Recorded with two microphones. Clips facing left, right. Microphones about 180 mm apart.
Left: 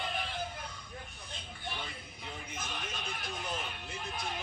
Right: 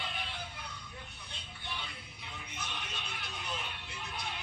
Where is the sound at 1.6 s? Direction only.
50° left (ahead or behind).